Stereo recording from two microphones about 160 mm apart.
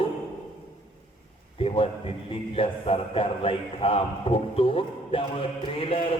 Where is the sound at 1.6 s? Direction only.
35° left (ahead or behind).